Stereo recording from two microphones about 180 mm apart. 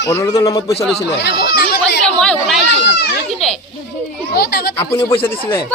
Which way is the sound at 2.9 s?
65° left (ahead or behind).